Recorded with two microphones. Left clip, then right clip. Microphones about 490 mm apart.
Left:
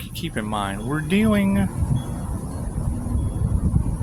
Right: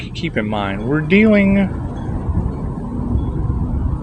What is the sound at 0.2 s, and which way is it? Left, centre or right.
Speech, left.